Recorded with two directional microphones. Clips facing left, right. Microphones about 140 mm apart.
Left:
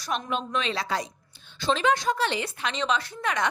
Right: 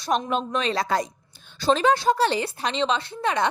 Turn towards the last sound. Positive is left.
turn(degrees=-30)  # may be behind; listen again after turning